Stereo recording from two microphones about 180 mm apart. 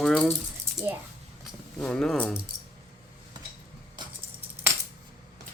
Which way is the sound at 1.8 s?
5° left (ahead or behind).